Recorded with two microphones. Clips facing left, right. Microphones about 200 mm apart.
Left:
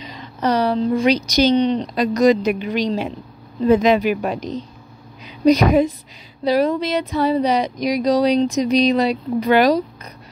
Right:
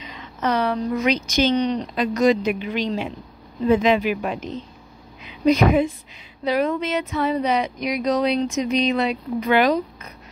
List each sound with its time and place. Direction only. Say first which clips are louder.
0.0 s a woman's voice: left 3 dB; 35° left (ahead or behind)